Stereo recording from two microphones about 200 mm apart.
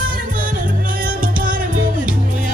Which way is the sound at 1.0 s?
45° right (ahead or behind).